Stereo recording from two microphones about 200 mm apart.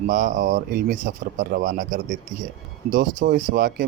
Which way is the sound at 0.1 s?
40° right (ahead or behind).